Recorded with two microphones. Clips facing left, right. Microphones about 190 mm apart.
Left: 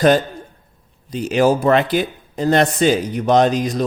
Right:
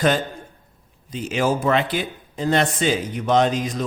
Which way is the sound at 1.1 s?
40° left (ahead or behind).